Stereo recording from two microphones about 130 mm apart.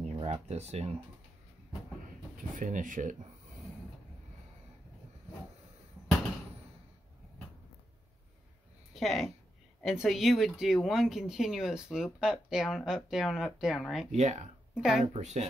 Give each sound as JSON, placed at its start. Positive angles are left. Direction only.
{"t": 0.0, "sound": "speech", "side_deg": -55}
{"t": 2.3, "sound": "speech", "side_deg": -90}
{"t": 8.9, "sound": "speech", "side_deg": 0}
{"t": 14.1, "sound": "speech", "side_deg": -65}
{"t": 14.7, "sound": "a woman's voice", "side_deg": -5}
{"t": 15.1, "sound": "speech", "side_deg": -60}